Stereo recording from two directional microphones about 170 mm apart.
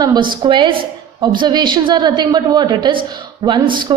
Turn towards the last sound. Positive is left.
turn(degrees=-25)  # may be behind; listen again after turning